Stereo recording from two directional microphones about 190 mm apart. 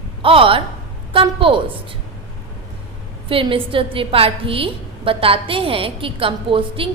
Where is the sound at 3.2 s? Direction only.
30° right (ahead or behind).